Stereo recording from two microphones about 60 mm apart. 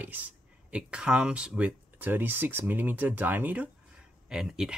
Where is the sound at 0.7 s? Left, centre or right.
Centre.